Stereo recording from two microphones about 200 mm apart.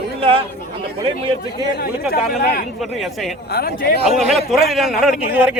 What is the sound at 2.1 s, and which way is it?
Speech, 50° left (ahead or behind).